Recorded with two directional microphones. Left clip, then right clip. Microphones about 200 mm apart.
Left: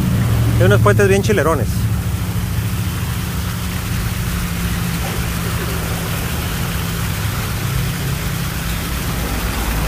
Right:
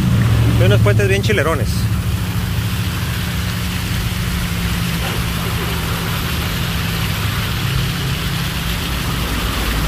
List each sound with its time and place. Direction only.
0.7 s speech: 35° left (ahead or behind)